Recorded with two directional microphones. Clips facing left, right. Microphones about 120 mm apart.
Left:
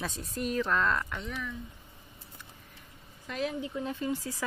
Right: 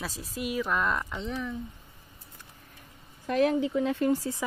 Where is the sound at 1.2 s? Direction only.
30° right (ahead or behind).